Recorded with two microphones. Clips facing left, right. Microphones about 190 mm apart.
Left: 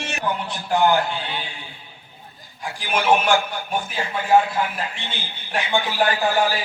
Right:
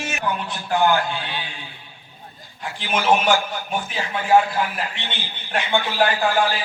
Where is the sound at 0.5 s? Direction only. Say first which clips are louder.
Left 1 dB; 15° left (ahead or behind).